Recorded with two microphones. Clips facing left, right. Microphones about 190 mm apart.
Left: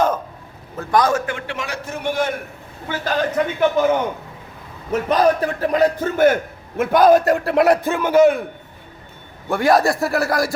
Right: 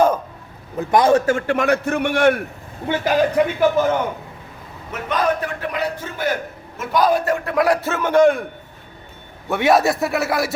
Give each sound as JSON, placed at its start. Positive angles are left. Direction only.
{"t": 0.8, "sound": "a man's voice", "side_deg": -20}
{"t": 1.3, "sound": "a man's voice", "side_deg": -50}
{"t": 2.9, "sound": "a man's voice", "side_deg": -15}
{"t": 4.9, "sound": "a man's voice", "side_deg": 35}
{"t": 9.5, "sound": "a man's voice", "side_deg": 0}